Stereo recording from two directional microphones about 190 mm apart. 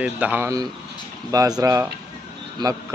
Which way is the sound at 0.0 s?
10° right (ahead or behind).